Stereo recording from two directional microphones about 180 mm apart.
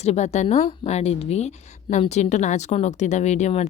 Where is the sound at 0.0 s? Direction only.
40° left (ahead or behind).